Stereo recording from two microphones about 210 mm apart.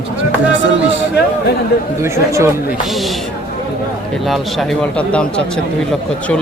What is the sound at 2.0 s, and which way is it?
Speech, 10° right (ahead or behind).